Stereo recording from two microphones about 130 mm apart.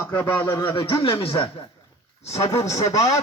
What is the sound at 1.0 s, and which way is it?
Speech, 45° left (ahead or behind).